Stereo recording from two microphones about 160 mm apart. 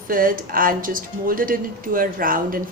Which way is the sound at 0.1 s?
60° right (ahead or behind).